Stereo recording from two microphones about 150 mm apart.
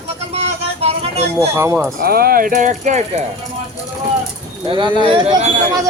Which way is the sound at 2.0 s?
90° right.